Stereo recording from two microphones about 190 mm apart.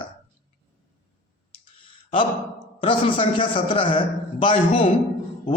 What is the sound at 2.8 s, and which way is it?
A man's voice, 25° left (ahead or behind).